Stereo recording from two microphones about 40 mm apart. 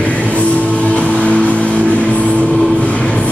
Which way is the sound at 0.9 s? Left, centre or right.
Left.